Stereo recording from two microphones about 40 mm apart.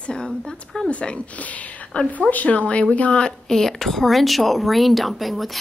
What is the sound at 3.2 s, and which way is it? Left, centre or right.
A woman's voice, centre.